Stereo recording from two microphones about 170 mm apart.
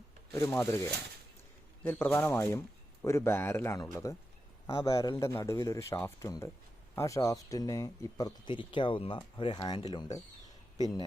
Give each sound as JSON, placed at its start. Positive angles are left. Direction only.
{"t": 0.3, "sound": "speech", "side_deg": 15}